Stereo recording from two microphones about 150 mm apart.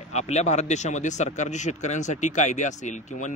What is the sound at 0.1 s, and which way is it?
Speech, 50° left (ahead or behind).